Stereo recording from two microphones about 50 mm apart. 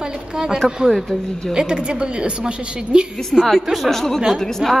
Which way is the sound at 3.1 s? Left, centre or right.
Centre.